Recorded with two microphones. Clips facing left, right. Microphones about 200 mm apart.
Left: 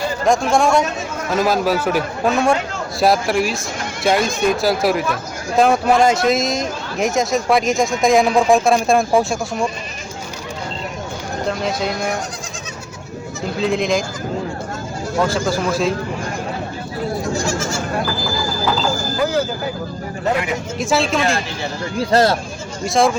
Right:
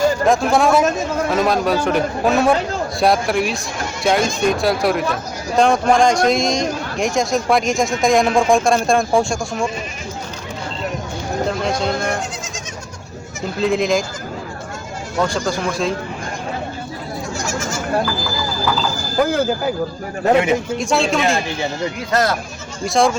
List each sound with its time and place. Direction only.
0.3 s speech: centre (ahead or behind)
11.4 s speech: centre (ahead or behind)
13.6 s speech: centre (ahead or behind)
15.3 s speech: 5° left (ahead or behind)
19.2 s a sound: 45° right (ahead or behind)
20.3 s speech: 25° right (ahead or behind)
20.7 s speech: centre (ahead or behind)
21.9 s speech: 30° left (ahead or behind)
22.9 s speech: centre (ahead or behind)